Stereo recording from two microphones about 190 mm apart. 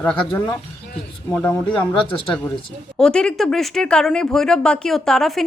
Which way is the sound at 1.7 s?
25° left (ahead or behind).